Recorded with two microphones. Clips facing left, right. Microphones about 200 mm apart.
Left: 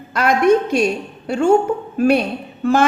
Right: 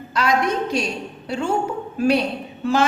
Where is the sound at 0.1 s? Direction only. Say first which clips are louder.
Left 7 dB; 55° left (ahead or behind).